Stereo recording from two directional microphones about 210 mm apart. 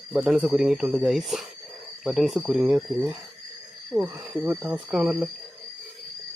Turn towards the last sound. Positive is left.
turn(degrees=0)  # may be behind; listen again after turning